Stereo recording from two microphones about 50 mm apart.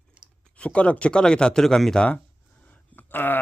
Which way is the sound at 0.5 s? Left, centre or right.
Left.